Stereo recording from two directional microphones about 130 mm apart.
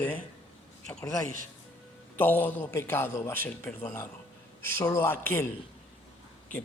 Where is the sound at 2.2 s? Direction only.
15° left (ahead or behind).